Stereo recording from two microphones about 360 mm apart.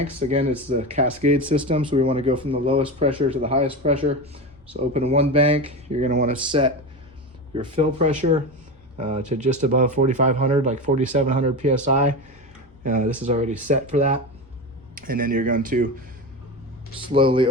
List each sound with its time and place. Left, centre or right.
0.0 s speech: centre
17.1 s speech: centre